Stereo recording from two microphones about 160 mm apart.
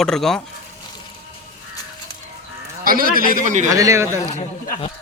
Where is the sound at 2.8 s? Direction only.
65° right (ahead or behind).